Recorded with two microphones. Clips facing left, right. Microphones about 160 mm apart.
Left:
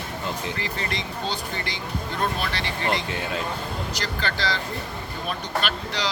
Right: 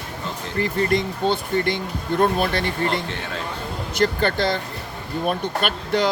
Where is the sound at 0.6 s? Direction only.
50° right (ahead or behind).